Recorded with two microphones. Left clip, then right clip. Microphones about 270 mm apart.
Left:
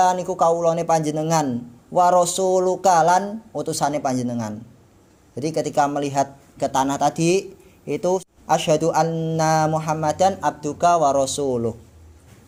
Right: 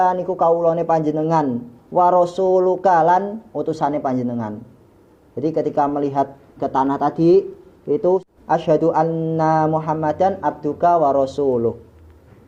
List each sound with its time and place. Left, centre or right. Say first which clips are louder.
0.0 s speech: right 1 dB; left